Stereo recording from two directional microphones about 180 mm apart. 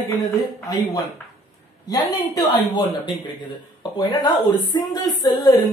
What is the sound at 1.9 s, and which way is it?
Speech, 20° left (ahead or behind).